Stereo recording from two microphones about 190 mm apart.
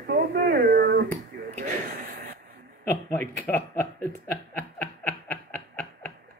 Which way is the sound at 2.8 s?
10° left (ahead or behind).